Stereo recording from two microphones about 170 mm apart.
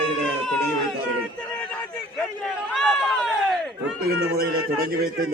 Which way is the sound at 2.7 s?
Centre (ahead or behind).